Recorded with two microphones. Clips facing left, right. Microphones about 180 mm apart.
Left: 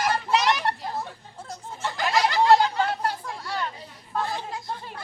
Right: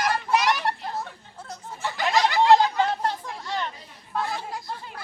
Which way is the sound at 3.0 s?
20° right (ahead or behind).